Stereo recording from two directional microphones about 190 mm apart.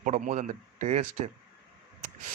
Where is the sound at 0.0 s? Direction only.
40° right (ahead or behind).